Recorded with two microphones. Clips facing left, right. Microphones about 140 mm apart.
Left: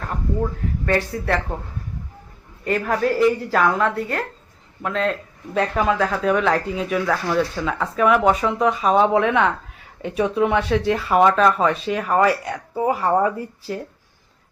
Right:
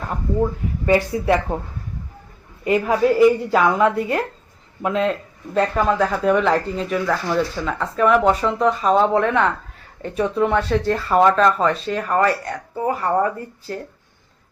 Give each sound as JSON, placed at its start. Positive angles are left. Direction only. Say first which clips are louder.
{"t": 0.9, "sound": "a woman's voice", "louder": "right 5 dB", "side_deg": -15}
{"t": 2.6, "sound": "a woman's voice", "louder": "right 4 dB", "side_deg": -5}
{"t": 5.5, "sound": "speech", "louder": "right 2 dB", "side_deg": 0}